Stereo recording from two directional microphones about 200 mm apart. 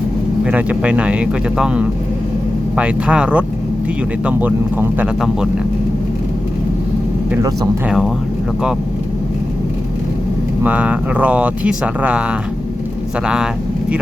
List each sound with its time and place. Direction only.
0.4 s speech: 5° right (ahead or behind)
7.3 s speech: 15° right (ahead or behind)
7.9 s speech: centre (ahead or behind)
10.6 s speech: 5° right (ahead or behind)
13.2 s speech: 5° right (ahead or behind)